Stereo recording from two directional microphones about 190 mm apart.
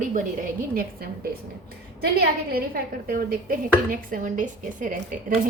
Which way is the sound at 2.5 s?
50° right (ahead or behind).